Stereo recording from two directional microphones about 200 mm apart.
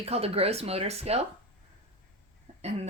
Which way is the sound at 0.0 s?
30° right (ahead or behind).